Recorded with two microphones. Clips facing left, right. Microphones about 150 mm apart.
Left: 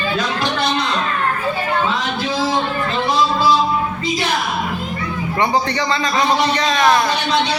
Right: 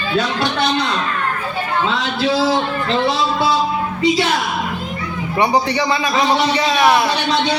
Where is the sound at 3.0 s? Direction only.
70° right (ahead or behind).